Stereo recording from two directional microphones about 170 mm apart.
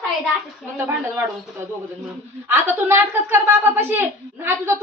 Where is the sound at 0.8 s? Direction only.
15° right (ahead or behind).